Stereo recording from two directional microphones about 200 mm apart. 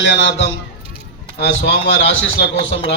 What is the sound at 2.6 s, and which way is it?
Speech, 65° left (ahead or behind).